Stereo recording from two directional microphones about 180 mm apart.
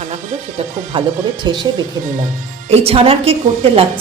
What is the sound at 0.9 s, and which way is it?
Speech, 25° right (ahead or behind).